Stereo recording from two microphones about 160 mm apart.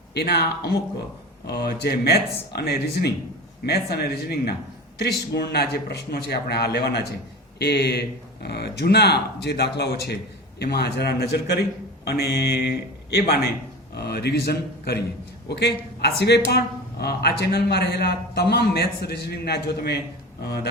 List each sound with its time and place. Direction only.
0.1 s a man's voice: 90° left
15.4 s a man's voice: 90° left